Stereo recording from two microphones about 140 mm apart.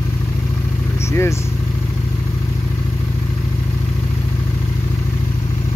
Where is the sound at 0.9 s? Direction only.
20° left (ahead or behind).